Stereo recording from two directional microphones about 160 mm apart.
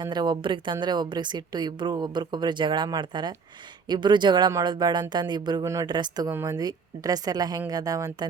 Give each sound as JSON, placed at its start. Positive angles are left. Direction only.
{"t": 0.0, "sound": "a woman's voice", "side_deg": -25}